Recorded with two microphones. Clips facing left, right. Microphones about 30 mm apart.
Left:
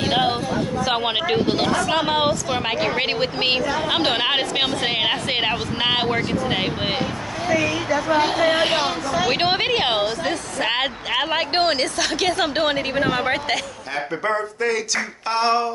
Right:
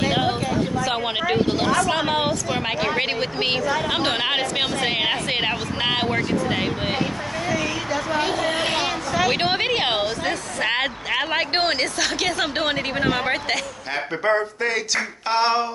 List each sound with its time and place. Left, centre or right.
0.0 s speech: centre
8.8 s speech: centre
9.3 s a woman's voice: centre
13.9 s speech: centre